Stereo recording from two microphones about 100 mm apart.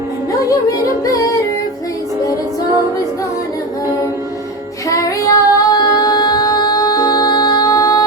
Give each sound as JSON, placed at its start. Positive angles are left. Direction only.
{"t": 1.0, "sound": "music", "side_deg": 35}
{"t": 4.9, "sound": "female singing", "side_deg": 35}